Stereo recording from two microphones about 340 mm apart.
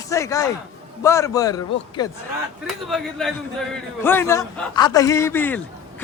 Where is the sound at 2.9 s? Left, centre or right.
Centre.